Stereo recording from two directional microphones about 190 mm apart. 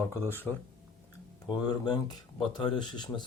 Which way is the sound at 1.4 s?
20° left (ahead or behind).